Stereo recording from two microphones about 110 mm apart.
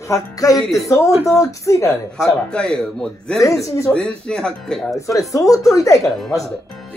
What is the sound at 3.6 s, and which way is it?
Speech, 30° left (ahead or behind).